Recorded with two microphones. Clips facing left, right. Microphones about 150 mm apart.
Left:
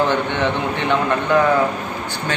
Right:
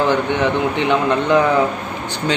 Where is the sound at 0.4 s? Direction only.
15° right (ahead or behind).